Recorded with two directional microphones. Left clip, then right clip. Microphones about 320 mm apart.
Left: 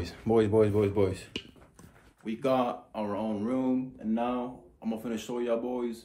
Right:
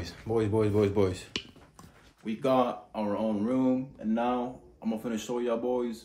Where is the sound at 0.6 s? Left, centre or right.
Centre.